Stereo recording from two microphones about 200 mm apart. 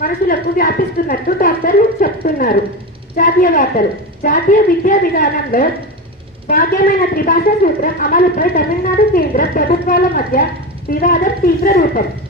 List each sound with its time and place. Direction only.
0.0 s a woman's voice: 45° left (ahead or behind)